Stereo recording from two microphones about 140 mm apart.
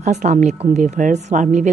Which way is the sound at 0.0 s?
55° right (ahead or behind).